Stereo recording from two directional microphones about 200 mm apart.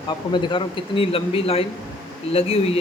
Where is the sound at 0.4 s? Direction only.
25° left (ahead or behind).